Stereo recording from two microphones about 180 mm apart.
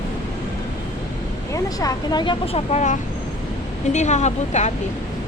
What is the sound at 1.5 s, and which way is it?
Speech, 20° left (ahead or behind).